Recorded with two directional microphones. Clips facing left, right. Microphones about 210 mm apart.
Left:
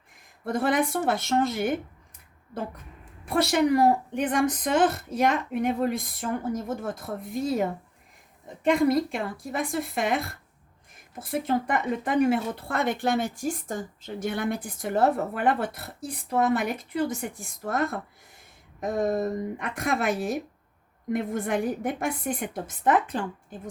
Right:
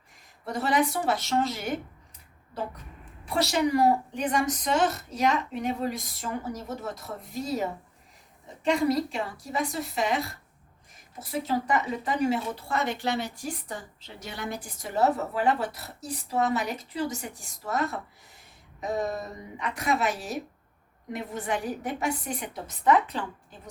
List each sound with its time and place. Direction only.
0.4 s speech: 55° left (ahead or behind)
3.2 s a woman's voice: 55° left (ahead or behind)